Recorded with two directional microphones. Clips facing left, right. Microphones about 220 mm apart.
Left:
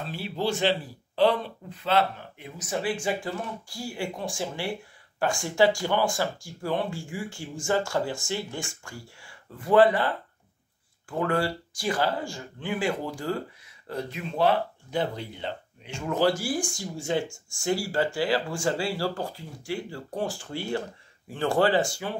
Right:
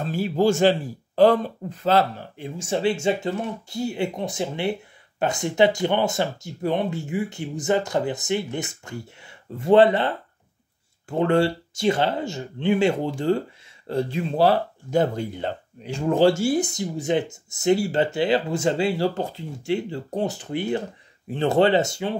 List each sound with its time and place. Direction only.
0.0 s speech: 45° right (ahead or behind); by 22.1 s 20° right (ahead or behind)